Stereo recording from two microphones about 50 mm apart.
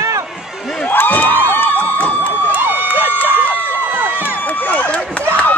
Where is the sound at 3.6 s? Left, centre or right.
Right.